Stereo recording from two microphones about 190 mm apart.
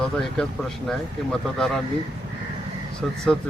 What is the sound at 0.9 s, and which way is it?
Speech, centre (ahead or behind).